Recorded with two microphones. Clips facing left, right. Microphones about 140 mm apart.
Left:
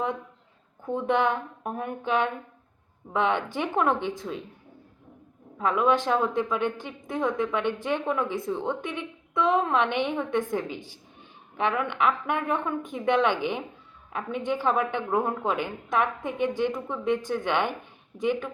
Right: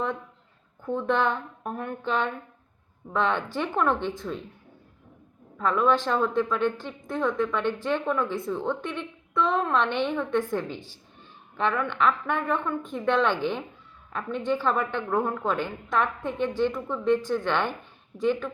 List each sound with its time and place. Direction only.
0.9 s a woman's voice: 20° left (ahead or behind)
5.5 s a woman's voice: 15° left (ahead or behind)